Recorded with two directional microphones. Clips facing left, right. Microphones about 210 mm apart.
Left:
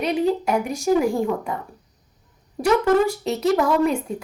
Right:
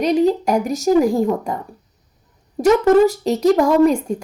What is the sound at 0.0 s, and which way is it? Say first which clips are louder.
A woman's voice: right 5 dB; 40° right (ahead or behind).